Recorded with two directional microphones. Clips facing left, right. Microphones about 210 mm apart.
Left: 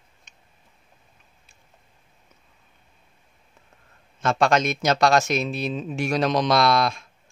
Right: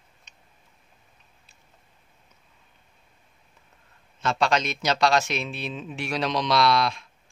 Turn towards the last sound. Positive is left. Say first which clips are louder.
# left 2 dB
turn(degrees=45)  # may be behind; listen again after turning